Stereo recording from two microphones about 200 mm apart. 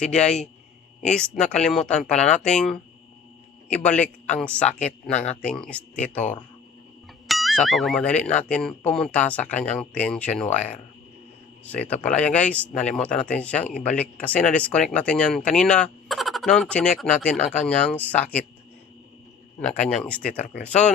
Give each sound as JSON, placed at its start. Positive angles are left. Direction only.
{"t": 1.1, "sound": "speech", "side_deg": 5}
{"t": 3.8, "sound": "speech", "side_deg": 5}
{"t": 19.5, "sound": "speech", "side_deg": 5}